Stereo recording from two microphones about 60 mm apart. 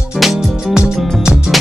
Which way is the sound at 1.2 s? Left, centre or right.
Centre.